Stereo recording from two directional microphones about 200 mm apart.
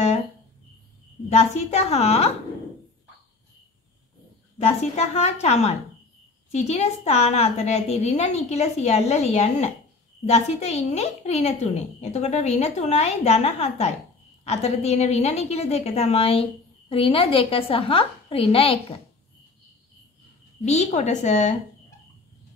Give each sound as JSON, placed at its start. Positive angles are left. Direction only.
{"t": 1.3, "sound": "a woman's voice", "side_deg": 35}
{"t": 4.9, "sound": "a woman's voice", "side_deg": 30}
{"t": 20.6, "sound": "a woman's voice", "side_deg": 35}